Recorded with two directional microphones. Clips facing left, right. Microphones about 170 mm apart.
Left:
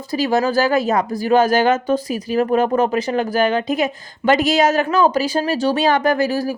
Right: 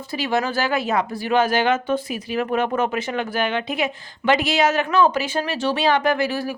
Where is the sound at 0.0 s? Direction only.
40° left (ahead or behind).